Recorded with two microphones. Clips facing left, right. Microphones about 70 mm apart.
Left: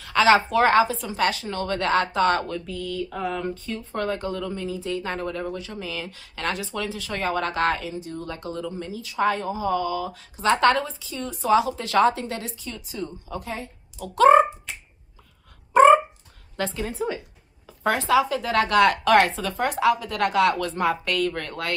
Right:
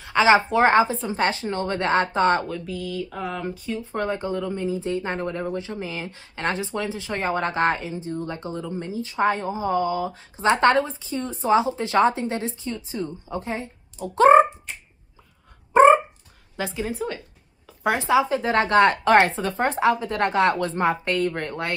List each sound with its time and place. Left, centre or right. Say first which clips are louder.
0.0 s a sound: right 1 dB; right
0.5 s speech: right 1 dB; right
2.4 s speech: right 1 dB; centre
3.6 s speech: right 1 dB; centre
15.7 s a sound: even; right
16.5 s a woman's voice: even; centre
17.8 s speech: even; right